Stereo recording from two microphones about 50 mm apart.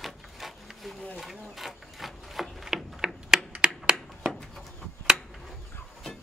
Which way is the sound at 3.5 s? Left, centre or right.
Centre.